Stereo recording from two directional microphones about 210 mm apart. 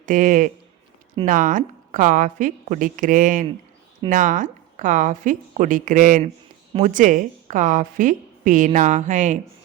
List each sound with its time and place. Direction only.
0.0 s a woman's voice: 40° right (ahead or behind)